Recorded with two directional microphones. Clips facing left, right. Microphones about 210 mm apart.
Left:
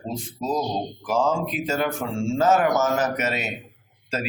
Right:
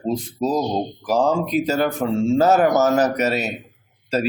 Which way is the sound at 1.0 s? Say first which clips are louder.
Right 3 dB; 40° right (ahead or behind).